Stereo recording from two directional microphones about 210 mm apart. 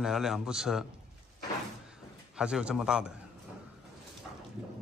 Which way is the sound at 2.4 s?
5° right (ahead or behind).